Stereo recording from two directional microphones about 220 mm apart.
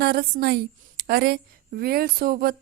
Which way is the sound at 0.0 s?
45° right (ahead or behind).